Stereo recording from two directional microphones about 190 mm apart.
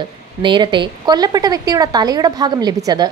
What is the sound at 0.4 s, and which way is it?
A woman's voice, 25° right (ahead or behind).